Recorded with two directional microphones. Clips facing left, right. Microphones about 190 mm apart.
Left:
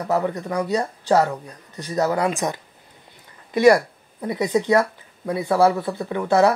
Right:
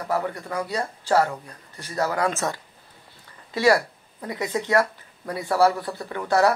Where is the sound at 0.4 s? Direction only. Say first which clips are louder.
Left 5 dB; 15° left (ahead or behind).